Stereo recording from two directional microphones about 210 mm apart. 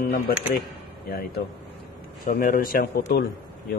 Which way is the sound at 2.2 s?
40° left (ahead or behind).